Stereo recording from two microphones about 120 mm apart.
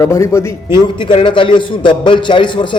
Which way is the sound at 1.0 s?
45° left (ahead or behind).